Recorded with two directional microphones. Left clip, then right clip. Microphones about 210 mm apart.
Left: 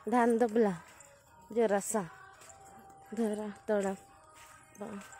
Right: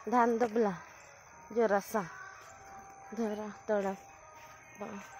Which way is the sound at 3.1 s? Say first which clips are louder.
Left 2 dB; 25° left (ahead or behind).